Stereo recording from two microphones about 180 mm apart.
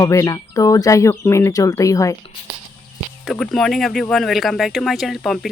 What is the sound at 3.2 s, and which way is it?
Speech, 5° left (ahead or behind).